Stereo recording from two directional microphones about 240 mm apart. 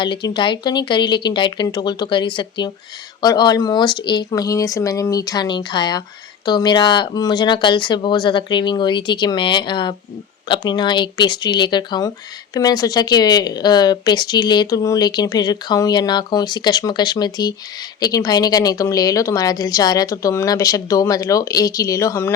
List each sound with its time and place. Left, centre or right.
0.0 s speech: centre